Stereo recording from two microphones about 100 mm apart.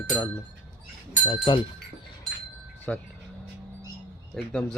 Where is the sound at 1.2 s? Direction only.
60° left (ahead or behind).